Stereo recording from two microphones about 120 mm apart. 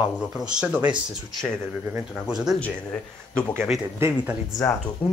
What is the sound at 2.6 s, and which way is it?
Speech, 10° left (ahead or behind).